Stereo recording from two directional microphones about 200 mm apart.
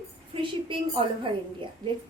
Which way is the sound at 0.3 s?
30° right (ahead or behind).